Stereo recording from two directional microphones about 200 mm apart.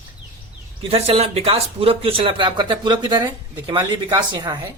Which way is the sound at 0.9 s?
30° right (ahead or behind).